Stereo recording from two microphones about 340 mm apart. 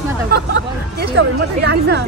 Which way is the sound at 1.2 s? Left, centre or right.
Right.